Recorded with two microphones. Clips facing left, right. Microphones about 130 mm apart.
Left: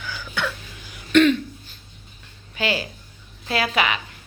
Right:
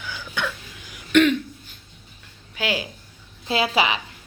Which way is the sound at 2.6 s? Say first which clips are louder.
Left 1 dB; 10° right (ahead or behind).